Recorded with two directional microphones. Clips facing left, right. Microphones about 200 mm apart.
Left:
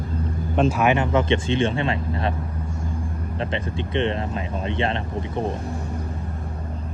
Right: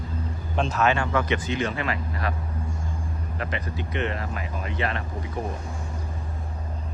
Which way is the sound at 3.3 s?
25° left (ahead or behind).